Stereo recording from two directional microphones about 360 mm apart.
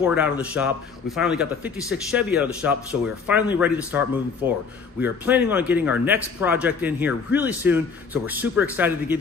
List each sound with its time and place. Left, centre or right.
0.0 s a man's voice: centre